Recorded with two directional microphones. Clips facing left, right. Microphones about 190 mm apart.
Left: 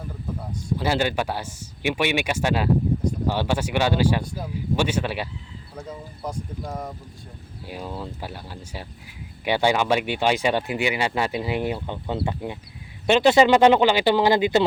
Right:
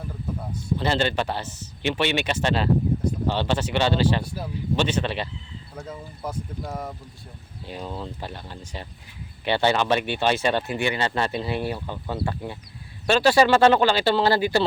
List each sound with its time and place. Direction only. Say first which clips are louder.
0.8 s speech: left 1 dB; 10° left (ahead or behind)
4.2 s speech: even; 5° right (ahead or behind)
4.8 s speech: even; 10° left (ahead or behind)
6.2 s speech: even; 5° right (ahead or behind)
7.7 s speech: even; 5° left (ahead or behind)